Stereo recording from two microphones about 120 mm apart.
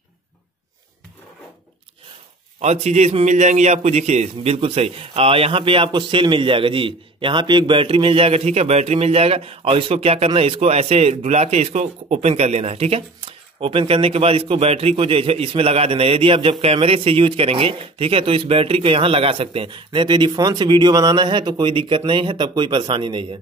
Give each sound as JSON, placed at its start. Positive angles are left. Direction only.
{"t": 2.6, "sound": "a man's voice", "side_deg": -65}